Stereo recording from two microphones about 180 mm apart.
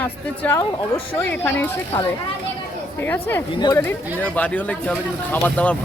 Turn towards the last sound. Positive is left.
turn(degrees=5)  # may be behind; listen again after turning